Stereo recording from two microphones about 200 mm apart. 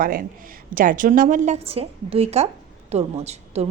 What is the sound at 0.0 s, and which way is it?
A woman's voice, 45° right (ahead or behind).